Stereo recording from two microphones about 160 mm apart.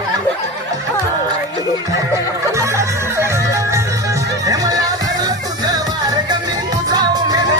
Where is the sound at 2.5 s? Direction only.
20° right (ahead or behind).